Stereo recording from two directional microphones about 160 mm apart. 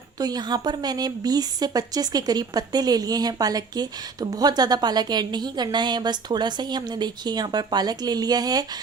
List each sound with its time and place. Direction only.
0.2 s speech: 25° right (ahead or behind)